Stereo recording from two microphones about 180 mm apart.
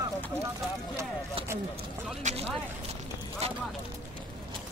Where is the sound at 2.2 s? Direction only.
35° right (ahead or behind).